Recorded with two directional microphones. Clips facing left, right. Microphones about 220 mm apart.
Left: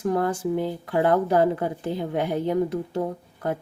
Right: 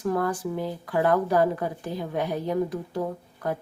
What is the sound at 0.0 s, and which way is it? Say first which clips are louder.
Speech: left 2 dB; 25° left (ahead or behind).